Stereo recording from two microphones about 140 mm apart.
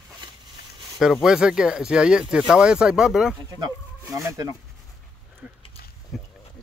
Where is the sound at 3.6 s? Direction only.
25° right (ahead or behind).